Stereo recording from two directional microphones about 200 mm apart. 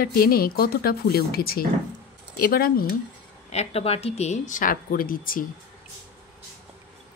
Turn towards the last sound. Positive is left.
turn(degrees=45)  # may be behind; listen again after turning